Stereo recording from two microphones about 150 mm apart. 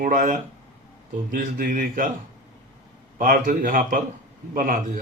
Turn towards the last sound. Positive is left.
turn(degrees=-60)  # may be behind; listen again after turning